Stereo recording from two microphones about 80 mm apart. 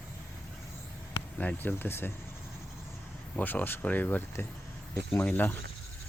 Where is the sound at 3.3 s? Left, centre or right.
Left.